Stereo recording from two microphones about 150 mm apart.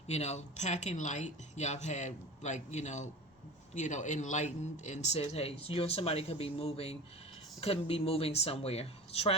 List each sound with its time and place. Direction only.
0.1 s speech: 50° left (ahead or behind)